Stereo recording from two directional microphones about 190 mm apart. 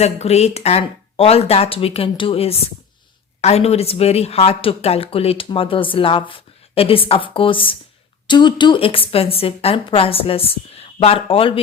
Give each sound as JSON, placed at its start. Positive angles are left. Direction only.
{"t": 0.0, "sound": "a woman's voice", "side_deg": 35}